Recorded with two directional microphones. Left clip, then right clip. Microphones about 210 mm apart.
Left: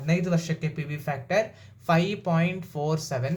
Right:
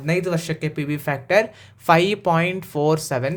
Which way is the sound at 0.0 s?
45° right (ahead or behind).